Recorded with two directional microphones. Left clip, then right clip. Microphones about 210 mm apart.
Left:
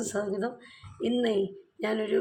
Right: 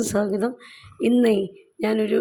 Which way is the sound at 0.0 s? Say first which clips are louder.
Right 8 dB; 40° right (ahead or behind).